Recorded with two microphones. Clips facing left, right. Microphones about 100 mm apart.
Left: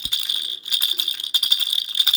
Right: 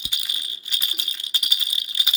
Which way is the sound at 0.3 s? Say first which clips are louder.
Left 1 dB; 20° left (ahead or behind).